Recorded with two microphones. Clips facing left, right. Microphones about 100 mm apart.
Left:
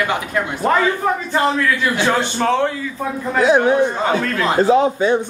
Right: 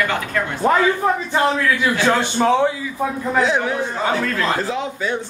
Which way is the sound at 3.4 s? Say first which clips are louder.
Left 9 dB; 20° left (ahead or behind).